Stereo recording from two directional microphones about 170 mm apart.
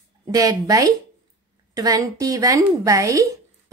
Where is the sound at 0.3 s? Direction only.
20° right (ahead or behind).